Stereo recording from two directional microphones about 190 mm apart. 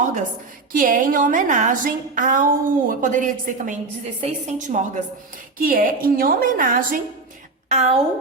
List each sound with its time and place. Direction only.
0.0 s a sound: 40° right (ahead or behind)
0.7 s a woman's voice: 45° right (ahead or behind)
7.7 s a woman's voice: 35° right (ahead or behind)